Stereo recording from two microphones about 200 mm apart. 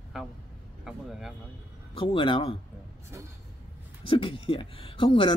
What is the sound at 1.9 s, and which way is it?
Speech, 25° left (ahead or behind).